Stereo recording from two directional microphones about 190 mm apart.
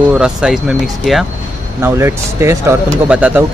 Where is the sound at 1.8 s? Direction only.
15° right (ahead or behind).